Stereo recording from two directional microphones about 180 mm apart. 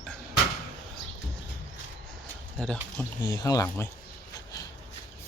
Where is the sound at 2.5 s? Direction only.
5° left (ahead or behind).